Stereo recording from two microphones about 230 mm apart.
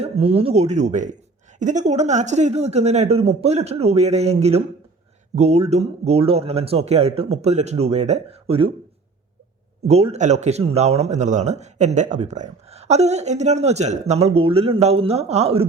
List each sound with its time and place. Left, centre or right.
0.0 s speech: right
9.8 s speech: right